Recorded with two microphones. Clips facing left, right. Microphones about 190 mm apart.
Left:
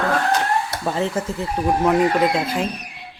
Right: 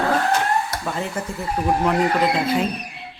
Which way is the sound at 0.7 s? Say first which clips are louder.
Left 4 dB; 30° left (ahead or behind).